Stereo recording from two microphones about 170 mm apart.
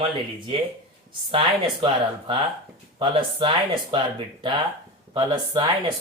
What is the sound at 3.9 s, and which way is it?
Speech, 30° right (ahead or behind).